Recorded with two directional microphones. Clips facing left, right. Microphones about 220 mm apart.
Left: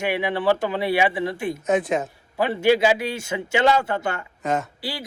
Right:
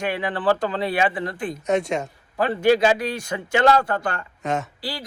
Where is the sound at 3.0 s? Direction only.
25° left (ahead or behind).